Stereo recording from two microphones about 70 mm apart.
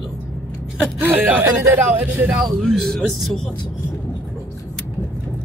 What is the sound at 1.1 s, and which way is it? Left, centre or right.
Speech, right.